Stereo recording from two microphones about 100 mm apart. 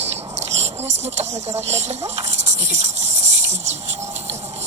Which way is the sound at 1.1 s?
90° right.